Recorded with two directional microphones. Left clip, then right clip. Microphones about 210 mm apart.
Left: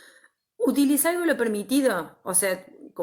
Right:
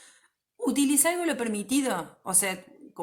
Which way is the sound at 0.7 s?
55° right (ahead or behind).